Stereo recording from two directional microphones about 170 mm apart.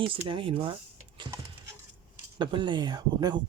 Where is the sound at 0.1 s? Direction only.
30° right (ahead or behind).